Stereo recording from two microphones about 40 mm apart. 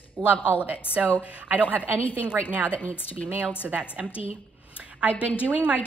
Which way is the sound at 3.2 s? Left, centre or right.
Right.